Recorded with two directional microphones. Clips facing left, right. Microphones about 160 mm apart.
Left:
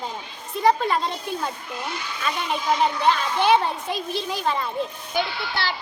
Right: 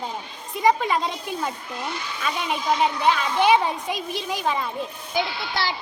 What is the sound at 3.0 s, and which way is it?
A child's voice, 5° right (ahead or behind).